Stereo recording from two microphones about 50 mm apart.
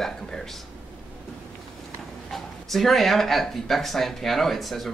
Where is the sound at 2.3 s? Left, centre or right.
Centre.